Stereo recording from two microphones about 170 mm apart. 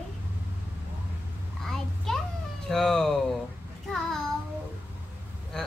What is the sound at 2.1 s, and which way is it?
Children playing, centre (ahead or behind).